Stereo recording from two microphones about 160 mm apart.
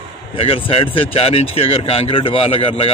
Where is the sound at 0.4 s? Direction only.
35° left (ahead or behind).